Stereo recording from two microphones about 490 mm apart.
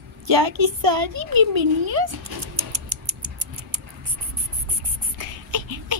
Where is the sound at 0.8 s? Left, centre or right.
Right.